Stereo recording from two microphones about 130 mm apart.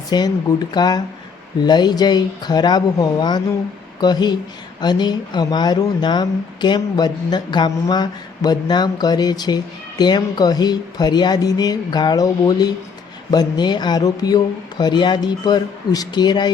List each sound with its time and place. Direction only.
0.1 s speech: 35° left (ahead or behind)